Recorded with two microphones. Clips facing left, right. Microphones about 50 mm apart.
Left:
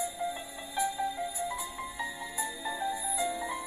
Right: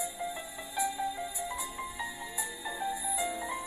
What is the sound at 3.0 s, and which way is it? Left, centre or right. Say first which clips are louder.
Music: left 1 dB; right.